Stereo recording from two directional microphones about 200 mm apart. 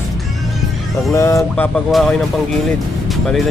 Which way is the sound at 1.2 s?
15° left (ahead or behind).